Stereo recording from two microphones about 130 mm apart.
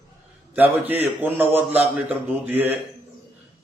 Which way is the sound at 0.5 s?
15° right (ahead or behind).